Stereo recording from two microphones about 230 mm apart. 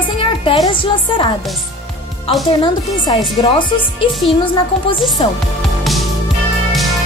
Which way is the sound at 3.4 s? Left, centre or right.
Left.